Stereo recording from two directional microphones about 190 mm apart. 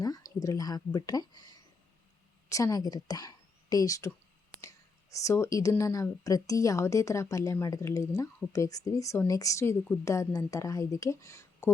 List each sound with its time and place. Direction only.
0.0 s speech: 20° left (ahead or behind)